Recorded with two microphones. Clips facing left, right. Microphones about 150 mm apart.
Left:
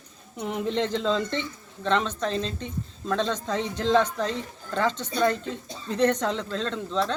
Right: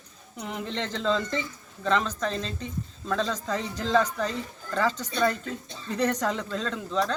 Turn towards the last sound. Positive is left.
turn(degrees=-5)  # may be behind; listen again after turning